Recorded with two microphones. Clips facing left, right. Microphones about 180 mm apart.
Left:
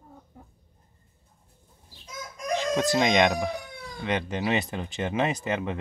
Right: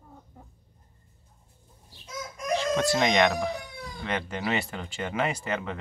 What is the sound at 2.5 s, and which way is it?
Speech, 20° left (ahead or behind).